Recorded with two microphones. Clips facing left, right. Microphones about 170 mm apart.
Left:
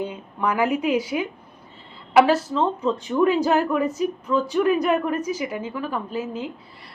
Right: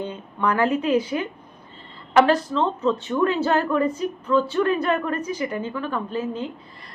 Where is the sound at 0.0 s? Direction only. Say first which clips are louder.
Even; 10° left (ahead or behind).